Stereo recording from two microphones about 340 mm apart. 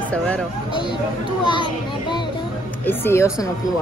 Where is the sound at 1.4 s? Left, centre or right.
Centre.